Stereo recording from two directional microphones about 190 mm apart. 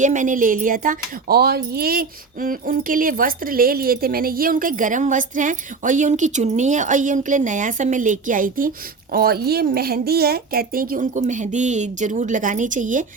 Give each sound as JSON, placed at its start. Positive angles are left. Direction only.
{"t": 0.0, "sound": "speech", "side_deg": -40}